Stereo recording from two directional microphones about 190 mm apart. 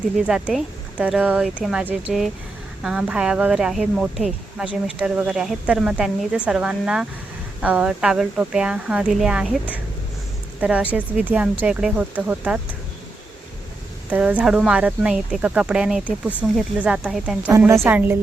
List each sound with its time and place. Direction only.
0.3 s a woman's voice: 5° right (ahead or behind)
14.1 s speech: 5° right (ahead or behind)
17.5 s speech: 15° right (ahead or behind)